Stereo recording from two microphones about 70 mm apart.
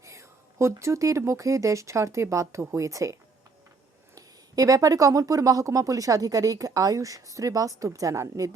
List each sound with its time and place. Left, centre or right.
0.0 s a sound: right
0.8 s speech: right
4.1 s speech: right